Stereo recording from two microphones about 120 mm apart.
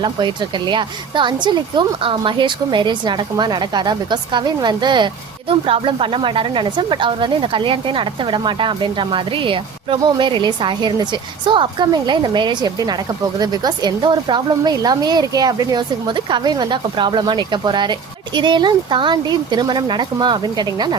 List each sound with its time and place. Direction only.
0.7 s a woman's voice: 40° right (ahead or behind)
5.5 s a woman's voice: 50° right (ahead or behind)